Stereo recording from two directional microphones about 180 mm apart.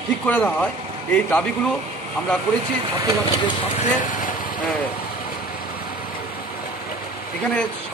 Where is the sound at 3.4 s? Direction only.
30° left (ahead or behind); by 4.6 s 50° left (ahead or behind).